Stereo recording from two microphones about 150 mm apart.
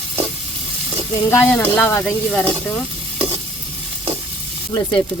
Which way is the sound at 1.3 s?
15° left (ahead or behind).